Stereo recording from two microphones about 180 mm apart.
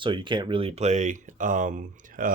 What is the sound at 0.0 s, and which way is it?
Speech, 25° right (ahead or behind).